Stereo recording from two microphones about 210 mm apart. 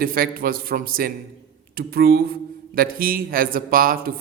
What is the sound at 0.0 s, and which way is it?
Speech, 45° right (ahead or behind).